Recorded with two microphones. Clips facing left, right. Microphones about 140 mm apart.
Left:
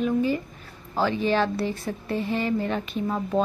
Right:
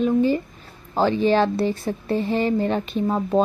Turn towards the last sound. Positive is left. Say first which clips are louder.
# right 5 dB
turn(degrees=-35)  # may be behind; listen again after turning